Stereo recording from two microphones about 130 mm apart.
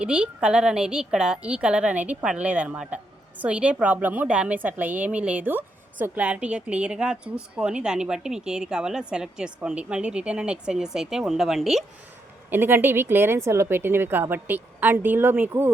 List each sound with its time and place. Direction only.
0.0 s a woman's voice: 10° right (ahead or behind)
12.5 s a woman's voice: 15° right (ahead or behind)